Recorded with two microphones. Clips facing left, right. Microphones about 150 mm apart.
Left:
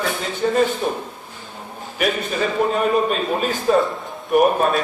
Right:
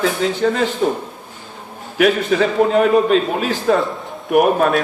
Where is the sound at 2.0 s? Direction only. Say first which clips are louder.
Right 7 dB; 75° right (ahead or behind).